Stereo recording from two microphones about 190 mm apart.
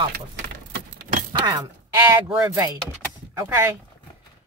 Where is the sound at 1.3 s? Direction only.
20° right (ahead or behind).